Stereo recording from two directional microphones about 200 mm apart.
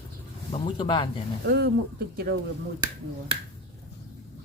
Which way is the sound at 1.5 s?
55° right (ahead or behind).